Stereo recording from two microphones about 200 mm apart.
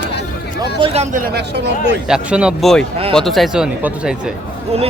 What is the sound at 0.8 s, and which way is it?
Speech, 25° right (ahead or behind).